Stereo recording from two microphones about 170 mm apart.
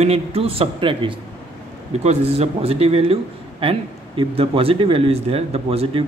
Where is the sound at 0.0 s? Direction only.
35° right (ahead or behind).